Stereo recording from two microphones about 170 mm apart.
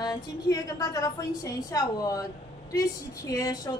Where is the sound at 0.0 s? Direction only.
20° left (ahead or behind).